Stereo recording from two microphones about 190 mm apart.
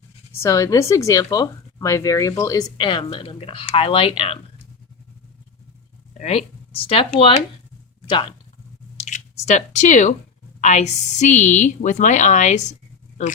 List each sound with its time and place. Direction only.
0.3 s speech: 15° left (ahead or behind)
6.1 s speech: 35° left (ahead or behind)
9.0 s a woman's voice: 40° left (ahead or behind)